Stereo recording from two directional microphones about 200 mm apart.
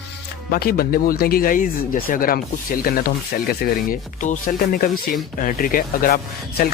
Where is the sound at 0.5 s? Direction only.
50° left (ahead or behind).